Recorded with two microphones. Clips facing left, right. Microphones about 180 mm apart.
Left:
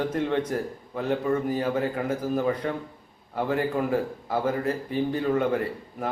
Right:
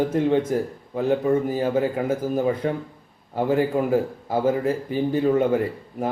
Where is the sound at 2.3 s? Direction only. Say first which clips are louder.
Right 2 dB; 25° right (ahead or behind).